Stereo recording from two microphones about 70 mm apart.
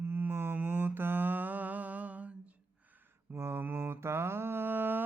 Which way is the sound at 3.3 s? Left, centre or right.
Right.